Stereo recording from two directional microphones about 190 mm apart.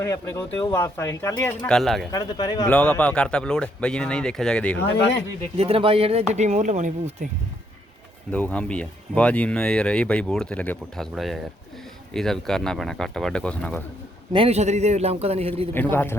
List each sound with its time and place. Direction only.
0.0 s speech: 15° left (ahead or behind)
2.1 s speech: 20° left (ahead or behind)
2.6 s speech: 5° left (ahead or behind)
5.5 s speech: 30° right (ahead or behind)
8.3 s speech: 5° left (ahead or behind)
14.3 s speech: 35° right (ahead or behind)
15.7 s speech: 10° left (ahead or behind)